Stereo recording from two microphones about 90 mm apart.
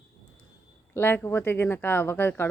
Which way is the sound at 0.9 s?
25° left (ahead or behind).